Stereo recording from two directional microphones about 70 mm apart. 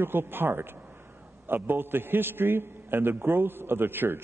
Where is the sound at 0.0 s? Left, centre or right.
Right.